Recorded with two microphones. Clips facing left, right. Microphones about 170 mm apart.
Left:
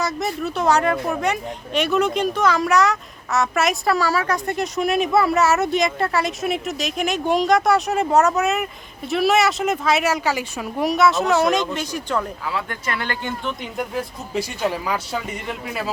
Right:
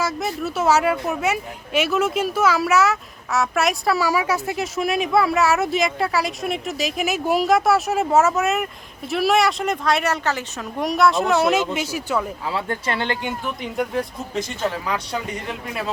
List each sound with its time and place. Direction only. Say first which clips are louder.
0.0 s speech: even; centre (ahead or behind)
12.5 s speech: right 2 dB; 30° right (ahead or behind)
13.2 s speech: even; centre (ahead or behind)